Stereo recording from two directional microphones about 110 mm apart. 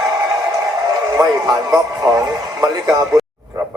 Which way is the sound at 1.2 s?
30° right (ahead or behind).